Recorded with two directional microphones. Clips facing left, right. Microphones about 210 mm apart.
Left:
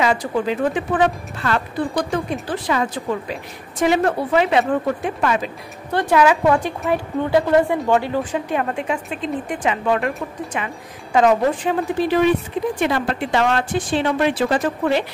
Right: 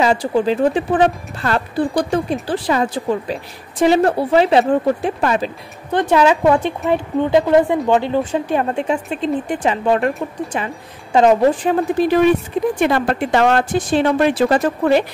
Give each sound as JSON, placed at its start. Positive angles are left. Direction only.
{"t": 0.0, "sound": "speech", "side_deg": -30}
{"t": 5.9, "sound": "a woman's voice", "side_deg": -20}
{"t": 12.8, "sound": "speech", "side_deg": -50}